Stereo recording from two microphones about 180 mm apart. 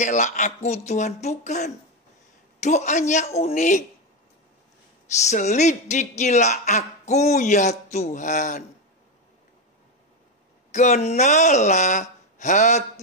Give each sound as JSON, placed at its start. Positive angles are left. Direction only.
{"t": 0.0, "sound": "speech", "side_deg": 45}
{"t": 5.3, "sound": "speech", "side_deg": 40}
{"t": 10.7, "sound": "speech", "side_deg": 40}